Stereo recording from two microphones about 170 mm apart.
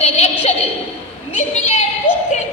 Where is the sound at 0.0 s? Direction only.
40° left (ahead or behind).